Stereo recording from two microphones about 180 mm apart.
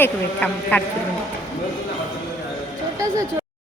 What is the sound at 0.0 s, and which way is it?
Speech, 10° left (ahead or behind).